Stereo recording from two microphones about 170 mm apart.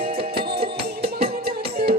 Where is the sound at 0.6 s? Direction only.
65° right (ahead or behind).